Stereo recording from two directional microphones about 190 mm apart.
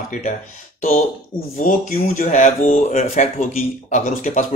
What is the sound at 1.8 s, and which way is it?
Speech, 45° left (ahead or behind).